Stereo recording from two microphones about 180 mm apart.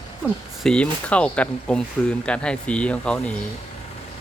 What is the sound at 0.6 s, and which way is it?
Speech, 5° left (ahead or behind).